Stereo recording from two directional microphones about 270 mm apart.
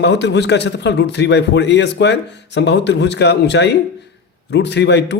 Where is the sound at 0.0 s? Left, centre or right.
Left.